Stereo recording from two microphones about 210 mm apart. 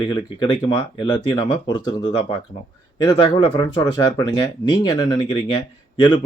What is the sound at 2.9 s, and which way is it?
Speech, 20° left (ahead or behind).